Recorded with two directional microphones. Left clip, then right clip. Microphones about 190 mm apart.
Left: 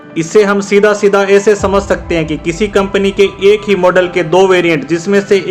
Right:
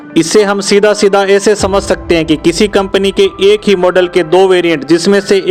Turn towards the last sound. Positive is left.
turn(degrees=-40)  # may be behind; listen again after turning